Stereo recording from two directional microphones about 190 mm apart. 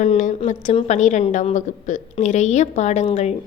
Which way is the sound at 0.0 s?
40° left (ahead or behind).